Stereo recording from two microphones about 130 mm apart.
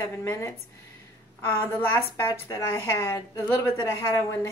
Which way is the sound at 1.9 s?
20° left (ahead or behind).